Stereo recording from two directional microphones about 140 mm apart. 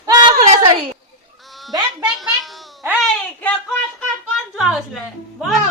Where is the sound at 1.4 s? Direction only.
Centre (ahead or behind).